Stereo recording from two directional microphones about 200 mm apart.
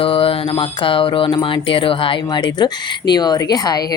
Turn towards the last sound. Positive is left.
turn(degrees=20)  # may be behind; listen again after turning